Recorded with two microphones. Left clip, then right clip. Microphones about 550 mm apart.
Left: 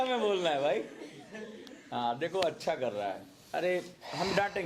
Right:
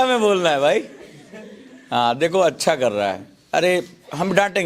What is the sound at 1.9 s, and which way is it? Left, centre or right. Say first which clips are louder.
A man's voice: right 15 dB; right.